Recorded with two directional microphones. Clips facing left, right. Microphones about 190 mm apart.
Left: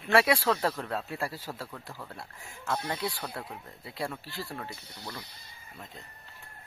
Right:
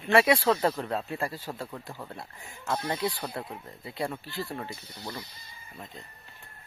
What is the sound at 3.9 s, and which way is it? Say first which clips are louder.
Speech: right 3 dB; centre (ahead or behind).